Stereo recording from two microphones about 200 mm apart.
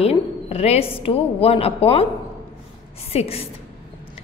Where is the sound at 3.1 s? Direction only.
30° left (ahead or behind).